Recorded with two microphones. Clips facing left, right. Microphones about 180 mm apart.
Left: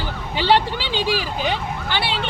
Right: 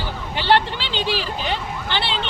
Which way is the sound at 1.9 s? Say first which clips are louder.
Even; 10° left (ahead or behind).